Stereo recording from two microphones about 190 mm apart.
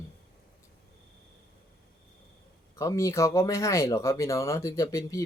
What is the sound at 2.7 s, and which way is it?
Speech, 15° left (ahead or behind).